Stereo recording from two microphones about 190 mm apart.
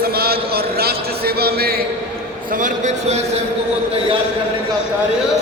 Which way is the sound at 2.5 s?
45° right (ahead or behind).